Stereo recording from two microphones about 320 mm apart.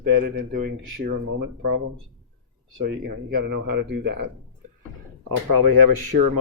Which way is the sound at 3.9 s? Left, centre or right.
Right.